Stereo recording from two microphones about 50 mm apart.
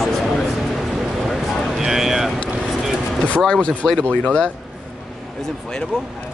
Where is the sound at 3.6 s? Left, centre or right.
Left.